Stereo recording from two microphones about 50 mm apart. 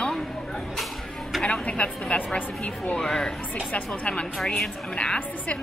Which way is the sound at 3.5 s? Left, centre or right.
Left.